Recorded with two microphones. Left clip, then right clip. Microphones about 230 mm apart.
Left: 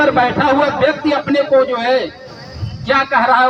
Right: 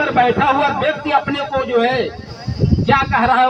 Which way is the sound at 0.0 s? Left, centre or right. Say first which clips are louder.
Left 1 dB; left.